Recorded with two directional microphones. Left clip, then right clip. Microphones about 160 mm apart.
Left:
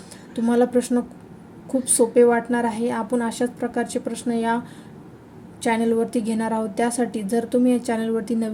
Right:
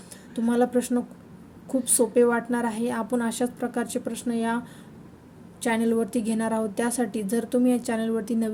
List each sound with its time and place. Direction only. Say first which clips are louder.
0.3 s a woman's voice: left 4 dB; 10° right (ahead or behind)
5.6 s a woman's voice: left 4 dB; 15° right (ahead or behind)